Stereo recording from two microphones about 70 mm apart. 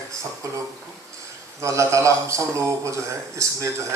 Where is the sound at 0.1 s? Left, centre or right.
Right.